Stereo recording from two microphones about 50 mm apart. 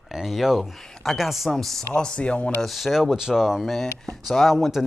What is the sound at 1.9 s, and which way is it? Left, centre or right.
Speech, centre.